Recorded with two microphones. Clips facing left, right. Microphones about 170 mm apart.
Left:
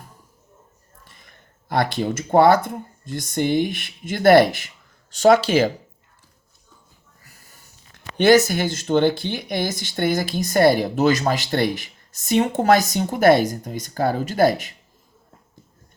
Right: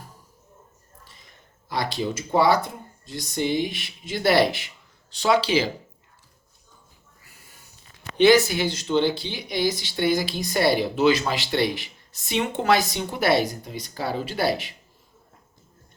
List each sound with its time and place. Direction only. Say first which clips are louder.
1.0 s speech: left 3 dB; 55° left (ahead or behind)
7.9 s speech: left 2 dB; 45° left (ahead or behind)